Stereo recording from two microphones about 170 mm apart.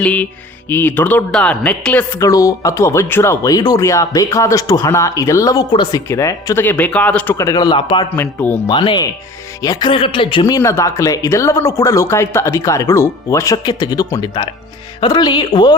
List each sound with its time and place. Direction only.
0.0 s speech: 10° left (ahead or behind); by 8.0 s 30° left (ahead or behind)
8.1 s speech: 10° left (ahead or behind)
8.6 s speech: 25° left (ahead or behind)
10.4 s speech: 20° left (ahead or behind)